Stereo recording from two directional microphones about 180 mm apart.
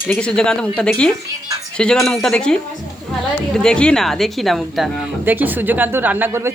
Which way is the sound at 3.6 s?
5° left (ahead or behind).